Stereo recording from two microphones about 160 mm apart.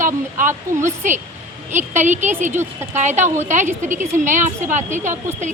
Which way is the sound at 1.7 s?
50° right (ahead or behind).